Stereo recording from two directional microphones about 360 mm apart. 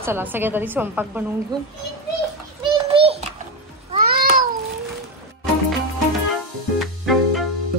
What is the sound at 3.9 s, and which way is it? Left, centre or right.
Cat, right.